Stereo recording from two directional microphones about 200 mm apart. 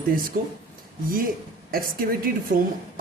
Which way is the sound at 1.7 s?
45° right (ahead or behind).